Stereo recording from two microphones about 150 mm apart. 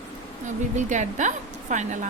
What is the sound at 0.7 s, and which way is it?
A woman's voice, 55° right (ahead or behind).